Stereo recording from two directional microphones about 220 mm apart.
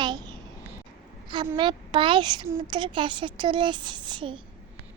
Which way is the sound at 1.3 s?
20° right (ahead or behind).